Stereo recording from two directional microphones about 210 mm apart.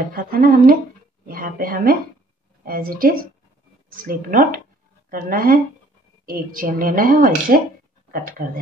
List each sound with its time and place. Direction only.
0.1 s a woman's voice: 45° right (ahead or behind)